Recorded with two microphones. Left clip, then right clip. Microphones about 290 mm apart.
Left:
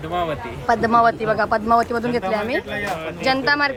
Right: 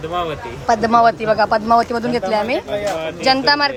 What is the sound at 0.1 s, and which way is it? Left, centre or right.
Speech, centre.